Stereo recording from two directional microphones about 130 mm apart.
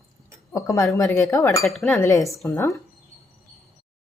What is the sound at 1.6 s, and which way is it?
Speech, centre (ahead or behind).